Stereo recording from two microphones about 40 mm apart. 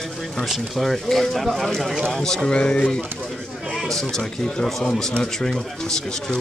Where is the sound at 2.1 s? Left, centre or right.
Centre.